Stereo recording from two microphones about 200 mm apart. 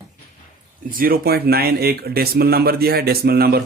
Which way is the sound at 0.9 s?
45° right (ahead or behind).